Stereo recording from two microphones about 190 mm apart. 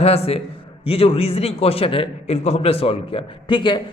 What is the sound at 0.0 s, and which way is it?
A man's voice, 35° left (ahead or behind).